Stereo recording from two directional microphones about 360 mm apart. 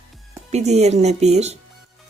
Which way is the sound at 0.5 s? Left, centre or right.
Centre.